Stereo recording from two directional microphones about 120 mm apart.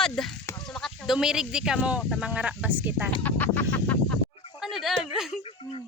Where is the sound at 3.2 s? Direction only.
15° left (ahead or behind).